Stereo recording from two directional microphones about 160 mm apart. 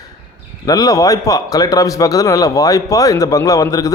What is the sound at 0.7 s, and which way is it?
A man's voice, 25° left (ahead or behind).